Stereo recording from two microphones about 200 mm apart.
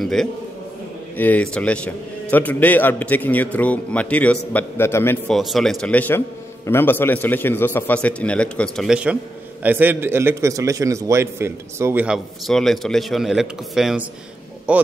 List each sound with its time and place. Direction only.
0.0 s a man's voice: centre (ahead or behind)